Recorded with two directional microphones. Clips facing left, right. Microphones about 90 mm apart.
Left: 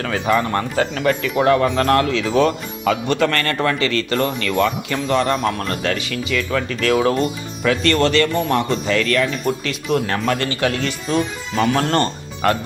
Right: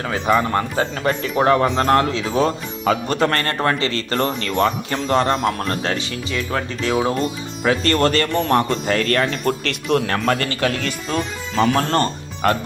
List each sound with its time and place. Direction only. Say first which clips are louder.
0.0 s speech: even; 30° right (ahead or behind)
9.5 s speech: right 1 dB; 60° right (ahead or behind); by 12.5 s 35° right (ahead or behind)